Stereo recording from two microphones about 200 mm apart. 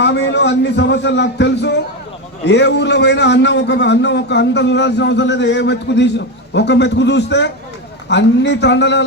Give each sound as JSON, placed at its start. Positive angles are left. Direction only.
{"t": 0.0, "sound": "a man's voice", "side_deg": 60}